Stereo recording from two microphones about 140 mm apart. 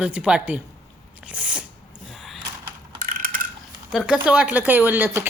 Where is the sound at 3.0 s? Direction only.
75° right (ahead or behind).